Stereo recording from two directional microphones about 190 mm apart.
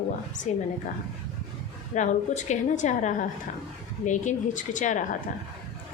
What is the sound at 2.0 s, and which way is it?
A woman's voice, 40° left (ahead or behind).